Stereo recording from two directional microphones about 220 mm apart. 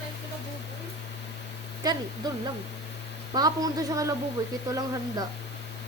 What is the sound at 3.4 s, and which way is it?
Speech, 15° right (ahead or behind).